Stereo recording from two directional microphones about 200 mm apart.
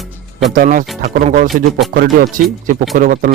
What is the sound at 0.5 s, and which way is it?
Speech, 40° right (ahead or behind).